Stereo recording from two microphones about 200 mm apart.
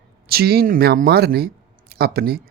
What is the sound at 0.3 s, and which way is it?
Speech, 50° right (ahead or behind).